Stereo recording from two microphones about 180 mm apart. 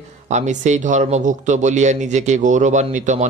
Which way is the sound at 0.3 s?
40° right (ahead or behind).